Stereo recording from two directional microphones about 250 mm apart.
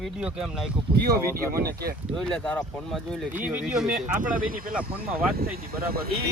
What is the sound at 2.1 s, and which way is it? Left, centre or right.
Speech, centre.